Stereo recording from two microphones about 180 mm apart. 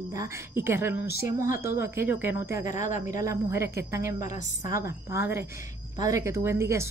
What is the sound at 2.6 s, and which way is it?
Speech, 45° left (ahead or behind).